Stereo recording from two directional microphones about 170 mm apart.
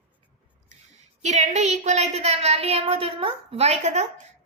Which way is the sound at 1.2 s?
40° right (ahead or behind).